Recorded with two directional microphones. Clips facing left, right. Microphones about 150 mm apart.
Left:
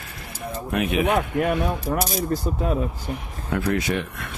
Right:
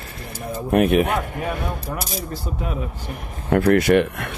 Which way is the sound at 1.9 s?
45° left (ahead or behind).